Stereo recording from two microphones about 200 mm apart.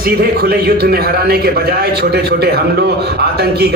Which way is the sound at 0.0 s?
50° right (ahead or behind).